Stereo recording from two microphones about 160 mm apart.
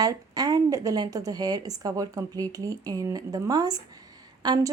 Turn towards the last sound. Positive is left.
turn(degrees=-25)  # may be behind; listen again after turning